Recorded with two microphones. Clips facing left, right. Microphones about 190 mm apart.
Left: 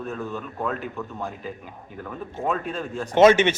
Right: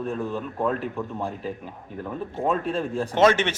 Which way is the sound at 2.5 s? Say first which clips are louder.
Right 3 dB; 30° right (ahead or behind).